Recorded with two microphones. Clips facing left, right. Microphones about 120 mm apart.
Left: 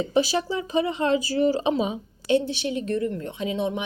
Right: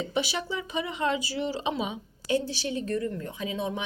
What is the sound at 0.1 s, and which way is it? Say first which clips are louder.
A woman's voice: left 7 dB; 40° left (ahead or behind).